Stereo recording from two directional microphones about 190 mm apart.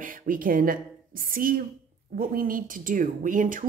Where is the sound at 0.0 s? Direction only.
50° right (ahead or behind).